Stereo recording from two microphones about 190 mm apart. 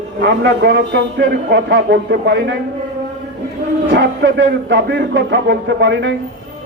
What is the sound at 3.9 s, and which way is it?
Speech, 70° right (ahead or behind).